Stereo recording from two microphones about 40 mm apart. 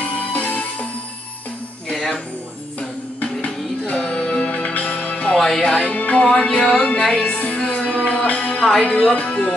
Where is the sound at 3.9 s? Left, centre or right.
Left.